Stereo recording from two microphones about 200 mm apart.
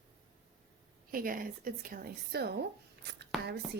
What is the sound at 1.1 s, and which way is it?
A woman's voice, 45° right (ahead or behind).